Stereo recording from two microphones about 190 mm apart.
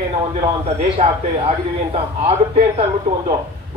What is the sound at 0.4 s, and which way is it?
A man's voice, 30° right (ahead or behind).